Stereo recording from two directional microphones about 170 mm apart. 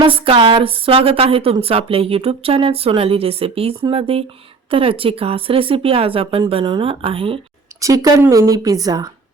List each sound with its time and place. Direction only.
0.0 s speech: 30° right (ahead or behind)
7.8 s speech: 20° right (ahead or behind)